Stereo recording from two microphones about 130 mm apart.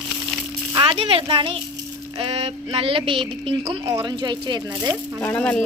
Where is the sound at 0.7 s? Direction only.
40° right (ahead or behind).